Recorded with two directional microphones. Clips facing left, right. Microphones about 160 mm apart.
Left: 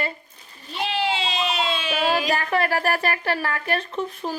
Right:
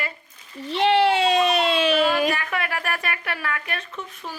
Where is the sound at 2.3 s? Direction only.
35° left (ahead or behind).